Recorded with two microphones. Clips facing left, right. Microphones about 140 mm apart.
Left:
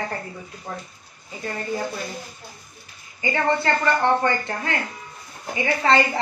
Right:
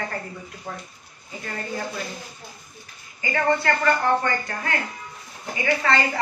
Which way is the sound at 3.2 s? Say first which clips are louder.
Even; 25° left (ahead or behind).